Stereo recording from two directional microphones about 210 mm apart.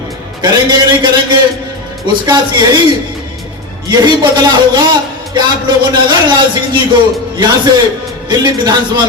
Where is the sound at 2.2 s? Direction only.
20° right (ahead or behind).